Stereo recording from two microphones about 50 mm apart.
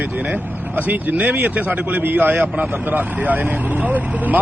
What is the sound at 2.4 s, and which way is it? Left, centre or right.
Speech, right.